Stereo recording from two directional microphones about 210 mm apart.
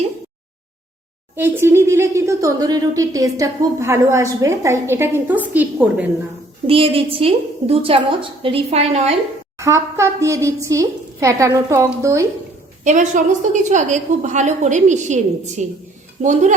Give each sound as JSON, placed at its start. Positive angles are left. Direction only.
{"t": 1.4, "sound": "speech", "side_deg": -10}
{"t": 6.7, "sound": "a woman's voice", "side_deg": -25}
{"t": 9.6, "sound": "speech", "side_deg": -15}
{"t": 12.8, "sound": "a woman's voice", "side_deg": -35}